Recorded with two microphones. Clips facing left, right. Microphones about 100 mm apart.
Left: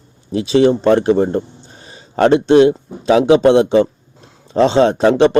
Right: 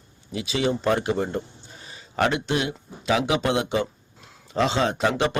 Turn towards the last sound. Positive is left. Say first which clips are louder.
# left 11 dB
turn(degrees=35)  # may be behind; listen again after turning